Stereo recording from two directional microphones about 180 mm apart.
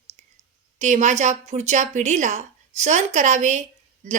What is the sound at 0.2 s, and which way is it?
Clicking, 40° right (ahead or behind).